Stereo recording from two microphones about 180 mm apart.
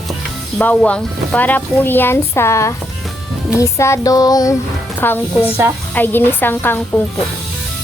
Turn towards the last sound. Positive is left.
turn(degrees=10)  # may be behind; listen again after turning